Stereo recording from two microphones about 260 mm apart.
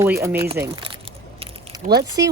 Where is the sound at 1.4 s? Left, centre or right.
Centre.